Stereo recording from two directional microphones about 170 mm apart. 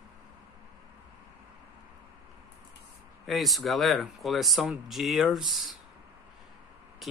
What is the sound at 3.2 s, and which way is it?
Speech, centre (ahead or behind).